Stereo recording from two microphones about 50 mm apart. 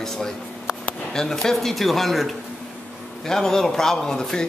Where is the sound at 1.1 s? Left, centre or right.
Centre.